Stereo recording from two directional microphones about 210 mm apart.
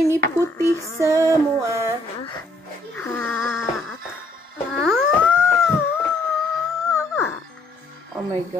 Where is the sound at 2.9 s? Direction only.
10° left (ahead or behind).